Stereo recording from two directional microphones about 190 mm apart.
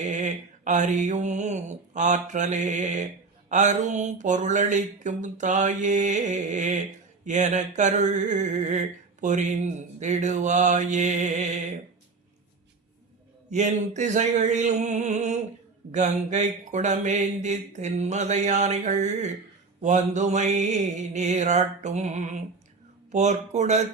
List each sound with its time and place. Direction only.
0.0 s speech: 40° right (ahead or behind)
13.5 s speech: 40° right (ahead or behind)